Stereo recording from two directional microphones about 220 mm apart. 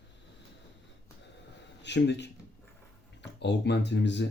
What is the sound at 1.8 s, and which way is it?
Speech, 50° left (ahead or behind).